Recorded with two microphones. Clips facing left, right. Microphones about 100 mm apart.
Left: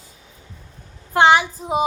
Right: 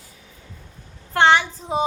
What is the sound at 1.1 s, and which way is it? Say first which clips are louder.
Speech: left 2 dB; 15° left (ahead or behind).